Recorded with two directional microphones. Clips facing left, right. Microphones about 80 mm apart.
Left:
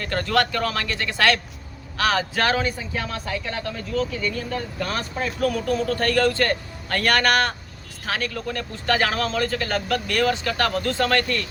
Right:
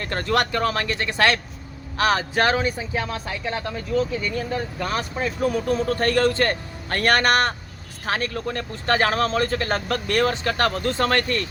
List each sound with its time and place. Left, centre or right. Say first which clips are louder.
0.0 s speech: left 1 dB; right